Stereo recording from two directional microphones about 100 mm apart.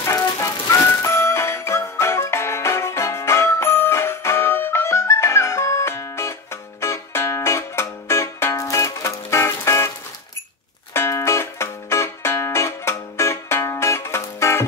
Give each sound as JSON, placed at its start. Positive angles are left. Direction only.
{"t": 0.0, "sound": "music", "side_deg": 35}